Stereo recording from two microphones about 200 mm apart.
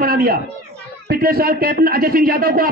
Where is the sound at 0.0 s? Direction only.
50° right (ahead or behind).